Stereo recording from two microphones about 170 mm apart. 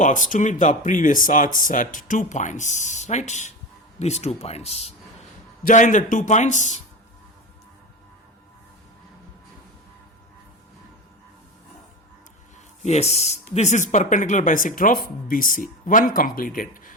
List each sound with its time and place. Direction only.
0.0 s speech: 50° left (ahead or behind)
5.6 s speech: 50° left (ahead or behind)
12.8 s speech: 40° left (ahead or behind)